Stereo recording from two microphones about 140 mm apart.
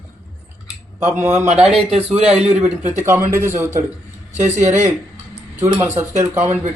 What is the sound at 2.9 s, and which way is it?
Speech, 20° right (ahead or behind).